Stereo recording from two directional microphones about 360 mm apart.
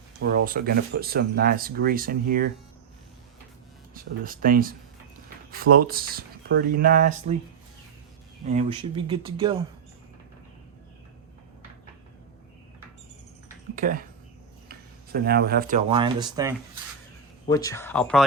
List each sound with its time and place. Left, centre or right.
0.2 s speech: right
3.9 s speech: right
8.4 s speech: centre
13.7 s speech: right
17.5 s speech: centre